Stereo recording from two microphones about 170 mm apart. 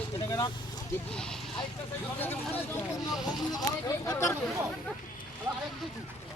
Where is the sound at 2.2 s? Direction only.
10° left (ahead or behind).